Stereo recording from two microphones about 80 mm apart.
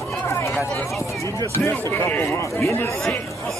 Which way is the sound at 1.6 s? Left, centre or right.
Left.